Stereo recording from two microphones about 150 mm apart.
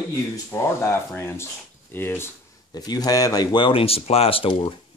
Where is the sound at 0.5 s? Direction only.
15° left (ahead or behind).